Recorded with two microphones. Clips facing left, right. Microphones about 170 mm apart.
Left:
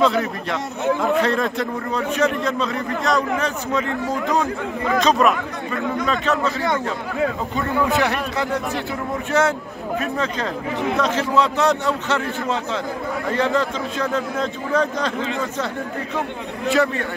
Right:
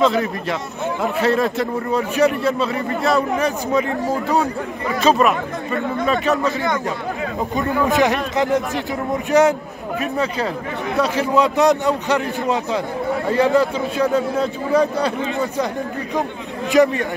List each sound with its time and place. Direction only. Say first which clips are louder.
0.0 s a man's voice: right 1 dB; centre (ahead or behind)
3.3 s a man's voice: right 4 dB; 15° right (ahead or behind)
4.0 s speech: right 2 dB; 35° right (ahead or behind)
5.0 s speech: right 3 dB; centre (ahead or behind)
6.0 s a man's voice: right 4 dB; 15° right (ahead or behind)
7.5 s a man's voice: right 5 dB; 20° right (ahead or behind)
16.2 s a man's voice: right 4 dB; 15° right (ahead or behind)